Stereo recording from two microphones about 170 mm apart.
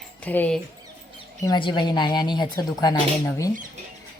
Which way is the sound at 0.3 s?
10° left (ahead or behind).